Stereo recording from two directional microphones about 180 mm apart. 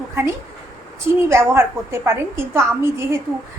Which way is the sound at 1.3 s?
15° right (ahead or behind).